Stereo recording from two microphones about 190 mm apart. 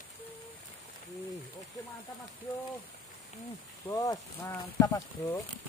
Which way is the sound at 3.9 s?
15° left (ahead or behind).